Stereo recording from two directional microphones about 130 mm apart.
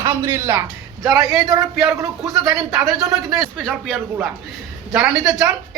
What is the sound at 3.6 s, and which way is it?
Speech, 5° left (ahead or behind).